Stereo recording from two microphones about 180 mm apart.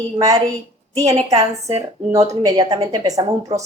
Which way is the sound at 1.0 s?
35° right (ahead or behind).